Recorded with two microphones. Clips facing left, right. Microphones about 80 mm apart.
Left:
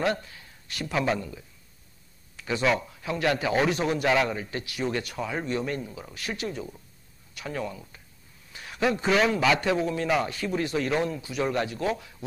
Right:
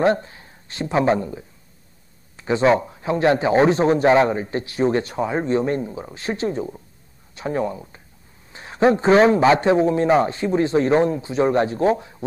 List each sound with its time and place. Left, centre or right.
0.0 s a man's voice: right